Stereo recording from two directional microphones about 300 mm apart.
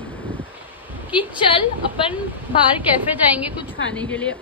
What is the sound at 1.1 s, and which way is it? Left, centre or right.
A woman's voice, centre.